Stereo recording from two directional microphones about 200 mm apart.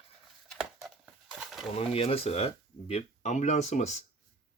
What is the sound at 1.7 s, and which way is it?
Speech, 30° left (ahead or behind).